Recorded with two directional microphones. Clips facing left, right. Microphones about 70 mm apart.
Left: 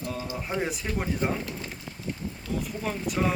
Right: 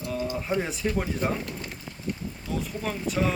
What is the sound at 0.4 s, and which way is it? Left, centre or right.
Speech, centre.